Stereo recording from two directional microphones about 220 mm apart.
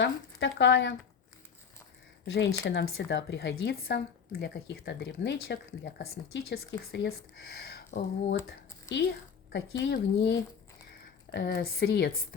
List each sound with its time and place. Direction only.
0.0 s speech: 55° left (ahead or behind)
2.2 s a woman's voice: 50° left (ahead or behind)